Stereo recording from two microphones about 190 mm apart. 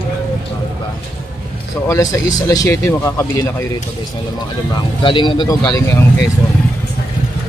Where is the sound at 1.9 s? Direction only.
20° left (ahead or behind).